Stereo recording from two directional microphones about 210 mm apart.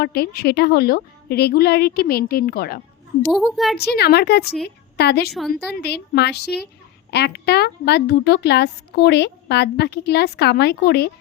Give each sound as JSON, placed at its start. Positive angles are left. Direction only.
{"t": 0.0, "sound": "a woman's voice", "side_deg": 50}
{"t": 3.2, "sound": "a woman's voice", "side_deg": 0}
{"t": 3.8, "sound": "a woman's voice", "side_deg": 50}
{"t": 5.3, "sound": "a woman's voice", "side_deg": 0}
{"t": 5.6, "sound": "a woman's voice", "side_deg": 50}